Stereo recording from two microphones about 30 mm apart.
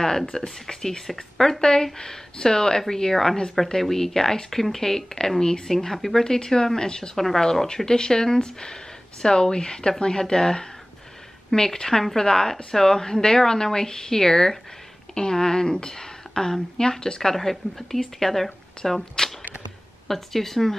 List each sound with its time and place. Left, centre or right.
0.3 s speech: centre
5.9 s speech: centre
6.2 s speech: centre
17.4 s speech: centre
20.1 s speech: centre